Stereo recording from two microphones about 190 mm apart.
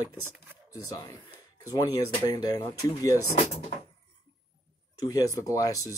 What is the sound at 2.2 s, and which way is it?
Speech, 20° left (ahead or behind).